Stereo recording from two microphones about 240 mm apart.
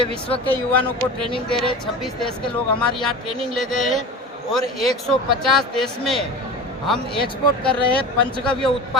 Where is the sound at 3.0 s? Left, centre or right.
Centre.